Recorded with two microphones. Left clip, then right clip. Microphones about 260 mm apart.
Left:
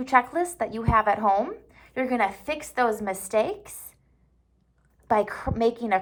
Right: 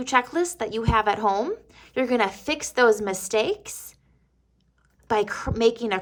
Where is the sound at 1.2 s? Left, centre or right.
Centre.